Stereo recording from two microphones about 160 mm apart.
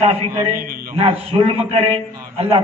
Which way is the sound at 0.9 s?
35° right (ahead or behind).